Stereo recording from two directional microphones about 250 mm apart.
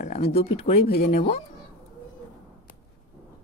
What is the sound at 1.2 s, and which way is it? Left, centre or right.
Speech, left.